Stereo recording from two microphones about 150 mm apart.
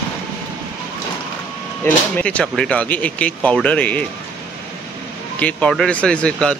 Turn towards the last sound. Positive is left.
turn(degrees=5)  # may be behind; listen again after turning